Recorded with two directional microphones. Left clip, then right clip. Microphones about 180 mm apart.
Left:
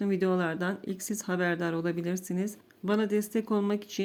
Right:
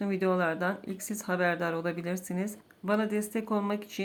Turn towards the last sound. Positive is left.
turn(degrees=25)  # may be behind; listen again after turning